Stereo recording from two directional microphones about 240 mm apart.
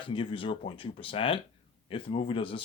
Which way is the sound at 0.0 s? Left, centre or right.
Left.